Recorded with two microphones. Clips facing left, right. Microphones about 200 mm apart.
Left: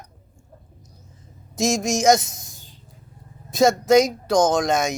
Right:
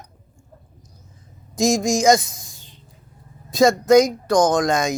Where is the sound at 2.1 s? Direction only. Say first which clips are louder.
Right 2 dB; centre (ahead or behind).